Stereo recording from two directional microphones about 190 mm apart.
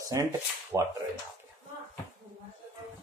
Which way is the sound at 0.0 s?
15° right (ahead or behind).